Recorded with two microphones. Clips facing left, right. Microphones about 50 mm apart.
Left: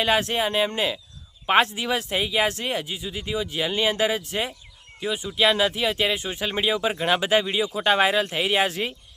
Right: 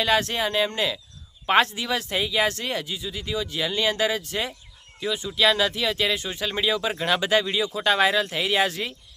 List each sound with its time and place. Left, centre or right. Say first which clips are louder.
0.0 s speech: left 1 dB; left